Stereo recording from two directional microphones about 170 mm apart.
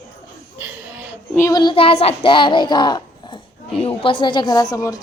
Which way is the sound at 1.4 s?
20° left (ahead or behind).